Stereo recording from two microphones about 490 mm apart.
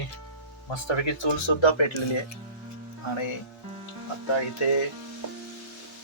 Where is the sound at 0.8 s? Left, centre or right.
Left.